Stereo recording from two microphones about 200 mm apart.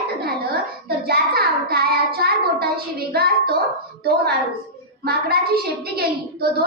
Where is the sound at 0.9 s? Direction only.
50° right (ahead or behind).